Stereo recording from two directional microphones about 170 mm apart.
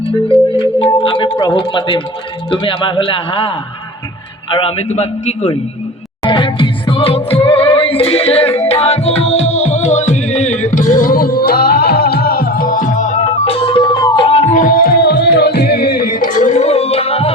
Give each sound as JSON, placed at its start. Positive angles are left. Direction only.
{"t": 0.0, "sound": "speech", "side_deg": 30}
{"t": 4.5, "sound": "speech", "side_deg": 35}
{"t": 6.2, "sound": "music", "side_deg": 30}
{"t": 14.5, "sound": "music", "side_deg": 55}